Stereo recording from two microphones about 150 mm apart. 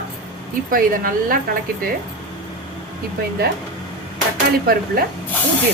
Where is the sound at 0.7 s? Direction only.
70° right (ahead or behind).